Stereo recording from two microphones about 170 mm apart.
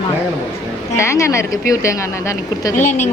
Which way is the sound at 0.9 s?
15° left (ahead or behind).